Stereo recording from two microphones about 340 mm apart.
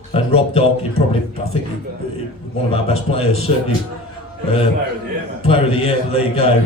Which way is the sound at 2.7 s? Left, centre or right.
Centre.